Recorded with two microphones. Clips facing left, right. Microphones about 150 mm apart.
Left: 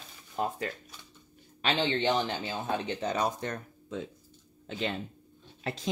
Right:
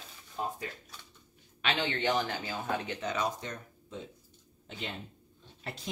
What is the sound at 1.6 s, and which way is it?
Speech, 30° left (ahead or behind).